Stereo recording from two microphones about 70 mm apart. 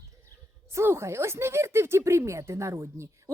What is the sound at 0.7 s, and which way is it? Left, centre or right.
A woman's voice, right.